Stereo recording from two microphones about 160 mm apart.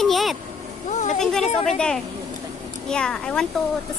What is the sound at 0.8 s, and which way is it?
Vehicle, 50° left (ahead or behind).